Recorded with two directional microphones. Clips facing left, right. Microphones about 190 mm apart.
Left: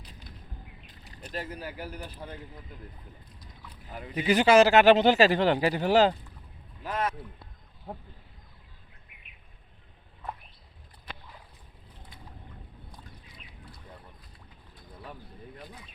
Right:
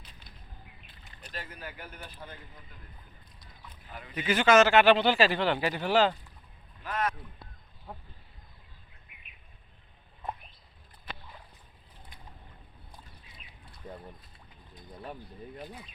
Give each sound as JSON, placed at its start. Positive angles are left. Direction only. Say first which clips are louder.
{"t": 0.0, "sound": "a sound", "louder": "left 6 dB", "side_deg": 40}
{"t": 0.9, "sound": "boat", "louder": "left 8 dB", "side_deg": 40}
{"t": 3.7, "sound": "rowboat", "louder": "left 5 dB", "side_deg": 35}
{"t": 4.3, "sound": "speech", "louder": "left 3 dB", "side_deg": 35}
{"t": 6.8, "sound": "speech", "louder": "left 1 dB", "side_deg": 25}